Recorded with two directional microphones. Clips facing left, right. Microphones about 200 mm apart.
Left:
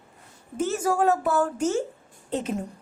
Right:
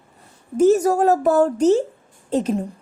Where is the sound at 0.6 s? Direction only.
40° right (ahead or behind).